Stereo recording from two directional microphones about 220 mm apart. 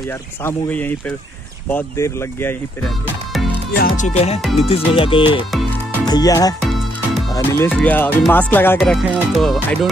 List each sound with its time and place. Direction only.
0.4 s speech: 10° left (ahead or behind)
3.8 s speech: 35° left (ahead or behind); by 6.5 s 15° left (ahead or behind)
6.6 s music: centre (ahead or behind)
7.3 s speech: 10° left (ahead or behind)